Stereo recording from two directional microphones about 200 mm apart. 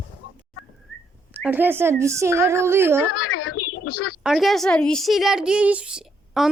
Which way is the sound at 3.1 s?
90° left.